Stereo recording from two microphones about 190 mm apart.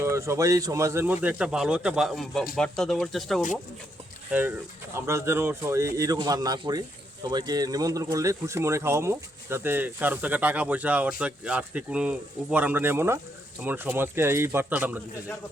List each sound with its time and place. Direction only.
0.0 s speech: 15° right (ahead or behind); by 3.4 s centre (ahead or behind)
4.3 s speech: 10° right (ahead or behind)